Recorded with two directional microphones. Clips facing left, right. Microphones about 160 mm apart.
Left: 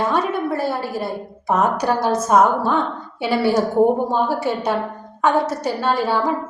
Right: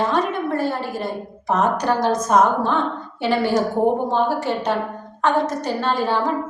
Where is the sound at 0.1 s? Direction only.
10° left (ahead or behind).